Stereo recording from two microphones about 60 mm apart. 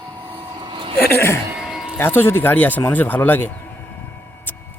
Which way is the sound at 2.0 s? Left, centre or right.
Left.